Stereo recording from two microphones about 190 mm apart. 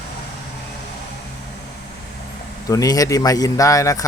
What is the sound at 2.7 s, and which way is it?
Speech, 20° left (ahead or behind).